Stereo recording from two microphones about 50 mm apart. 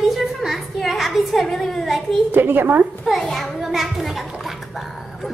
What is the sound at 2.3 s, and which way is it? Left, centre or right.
Speech, right.